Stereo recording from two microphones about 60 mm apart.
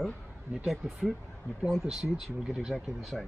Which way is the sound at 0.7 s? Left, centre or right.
Centre.